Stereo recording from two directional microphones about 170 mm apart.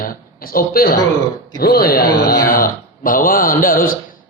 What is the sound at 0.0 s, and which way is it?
Speech, 60° left (ahead or behind).